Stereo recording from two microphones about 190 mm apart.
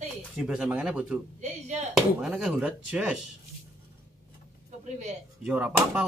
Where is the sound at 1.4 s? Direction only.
35° right (ahead or behind).